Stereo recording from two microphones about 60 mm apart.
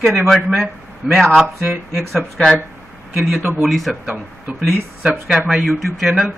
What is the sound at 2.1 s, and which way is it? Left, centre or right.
Speech, centre.